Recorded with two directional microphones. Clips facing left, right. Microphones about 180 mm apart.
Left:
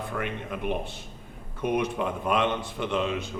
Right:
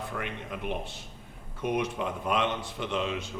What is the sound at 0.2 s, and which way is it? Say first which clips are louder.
Speech: left 4 dB; 50° left (ahead or behind).